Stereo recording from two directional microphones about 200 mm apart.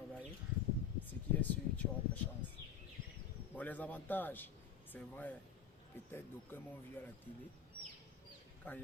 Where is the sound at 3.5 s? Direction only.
10° left (ahead or behind).